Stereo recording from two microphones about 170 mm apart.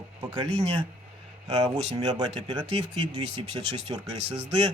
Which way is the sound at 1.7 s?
35° right (ahead or behind).